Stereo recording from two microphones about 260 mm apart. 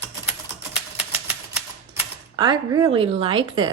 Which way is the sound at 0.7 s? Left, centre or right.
Centre.